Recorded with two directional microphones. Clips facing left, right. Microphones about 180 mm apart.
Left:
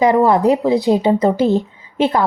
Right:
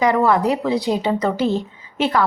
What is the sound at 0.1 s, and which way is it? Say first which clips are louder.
A woman's voice: left 4 dB; 20° left (ahead or behind).